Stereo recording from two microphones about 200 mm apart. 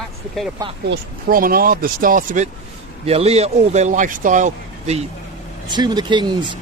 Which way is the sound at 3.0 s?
30° right (ahead or behind).